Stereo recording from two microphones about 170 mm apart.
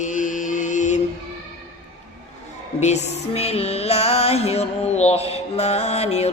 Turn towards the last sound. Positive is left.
turn(degrees=40)  # may be behind; listen again after turning